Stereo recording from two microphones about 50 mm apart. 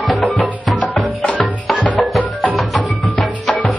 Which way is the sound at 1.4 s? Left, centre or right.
Centre.